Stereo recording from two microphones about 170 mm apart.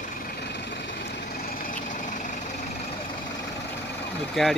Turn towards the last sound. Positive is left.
turn(degrees=0)  # may be behind; listen again after turning